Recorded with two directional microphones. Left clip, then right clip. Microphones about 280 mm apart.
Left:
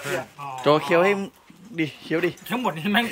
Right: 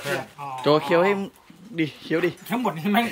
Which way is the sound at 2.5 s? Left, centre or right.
Centre.